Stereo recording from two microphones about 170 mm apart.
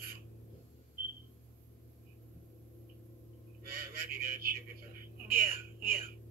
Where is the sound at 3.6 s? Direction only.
60° right (ahead or behind).